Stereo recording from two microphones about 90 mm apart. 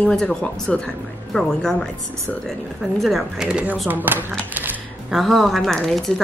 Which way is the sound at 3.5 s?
10° right (ahead or behind).